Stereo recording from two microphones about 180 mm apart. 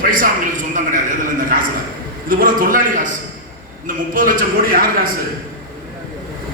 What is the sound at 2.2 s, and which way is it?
A man's voice, 50° right (ahead or behind).